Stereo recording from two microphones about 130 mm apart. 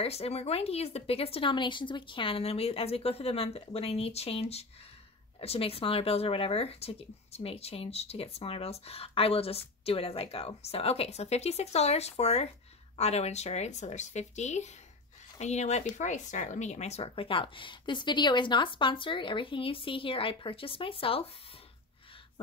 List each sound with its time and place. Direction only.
0.0 s speech: 50° left (ahead or behind)